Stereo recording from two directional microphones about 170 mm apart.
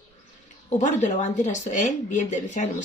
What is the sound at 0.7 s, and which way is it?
Speech, 45° left (ahead or behind).